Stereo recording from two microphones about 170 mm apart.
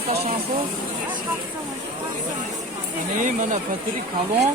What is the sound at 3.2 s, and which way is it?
Speech, 45° right (ahead or behind).